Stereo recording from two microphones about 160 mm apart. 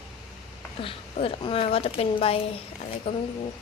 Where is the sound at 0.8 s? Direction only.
35° left (ahead or behind).